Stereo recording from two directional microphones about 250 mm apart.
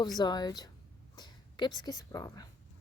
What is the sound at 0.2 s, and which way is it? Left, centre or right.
Speech, centre.